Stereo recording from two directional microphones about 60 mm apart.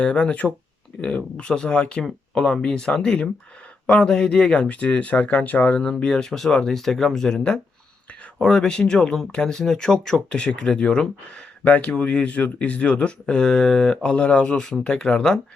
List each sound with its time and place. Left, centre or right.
0.0 s speech: centre
5.8 s speech: centre
11.6 s speech: left